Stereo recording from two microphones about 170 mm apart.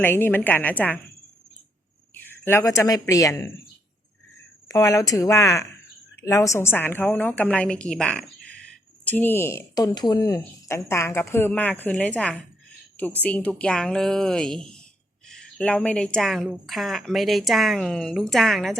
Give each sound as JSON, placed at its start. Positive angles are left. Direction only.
{"t": 0.0, "sound": "speech", "side_deg": 10}
{"t": 2.1, "sound": "speech", "side_deg": 15}
{"t": 4.7, "sound": "a woman's voice", "side_deg": 20}